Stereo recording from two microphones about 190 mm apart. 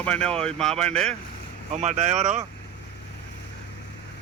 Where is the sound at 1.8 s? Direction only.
35° right (ahead or behind).